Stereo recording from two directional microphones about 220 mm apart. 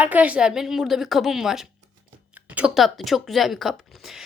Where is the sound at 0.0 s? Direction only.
5° right (ahead or behind).